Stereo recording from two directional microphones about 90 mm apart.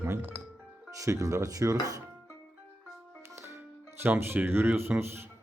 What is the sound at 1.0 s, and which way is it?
Speech, 35° right (ahead or behind).